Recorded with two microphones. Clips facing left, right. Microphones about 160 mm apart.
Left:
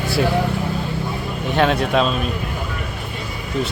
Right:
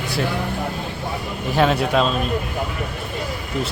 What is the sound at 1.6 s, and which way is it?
Speech, 5° right (ahead or behind).